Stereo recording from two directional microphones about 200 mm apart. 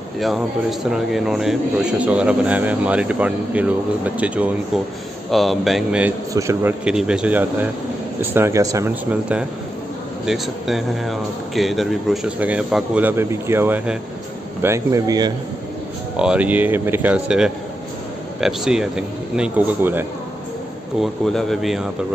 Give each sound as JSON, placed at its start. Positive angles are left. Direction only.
{"t": 0.2, "sound": "a man's voice", "side_deg": 0}
{"t": 16.2, "sound": "a man's voice", "side_deg": -5}
{"t": 21.0, "sound": "a man's voice", "side_deg": 0}